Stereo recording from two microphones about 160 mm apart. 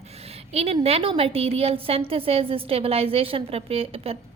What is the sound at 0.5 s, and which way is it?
A woman's voice, 40° right (ahead or behind).